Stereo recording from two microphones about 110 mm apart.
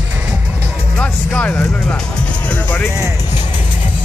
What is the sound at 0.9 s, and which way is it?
Music, 10° left (ahead or behind).